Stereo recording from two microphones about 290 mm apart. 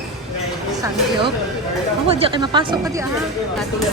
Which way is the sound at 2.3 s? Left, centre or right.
Centre.